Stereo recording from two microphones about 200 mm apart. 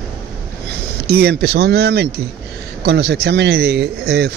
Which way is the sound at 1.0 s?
55° right (ahead or behind).